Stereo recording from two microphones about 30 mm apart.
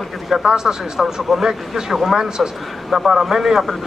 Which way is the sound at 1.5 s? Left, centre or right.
Centre.